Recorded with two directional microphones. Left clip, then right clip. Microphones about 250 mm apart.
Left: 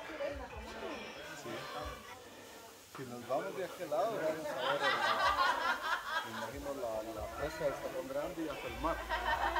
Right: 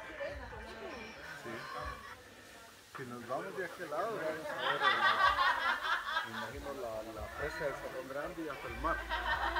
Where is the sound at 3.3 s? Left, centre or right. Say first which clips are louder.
Left 2 dB; left.